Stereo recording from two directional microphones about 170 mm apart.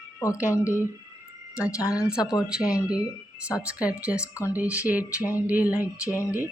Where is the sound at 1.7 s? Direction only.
15° left (ahead or behind).